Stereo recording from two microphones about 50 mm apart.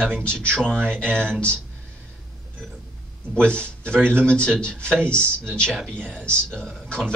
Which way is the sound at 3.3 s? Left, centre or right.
Left.